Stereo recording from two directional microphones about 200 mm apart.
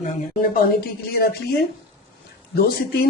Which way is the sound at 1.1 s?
50° left (ahead or behind).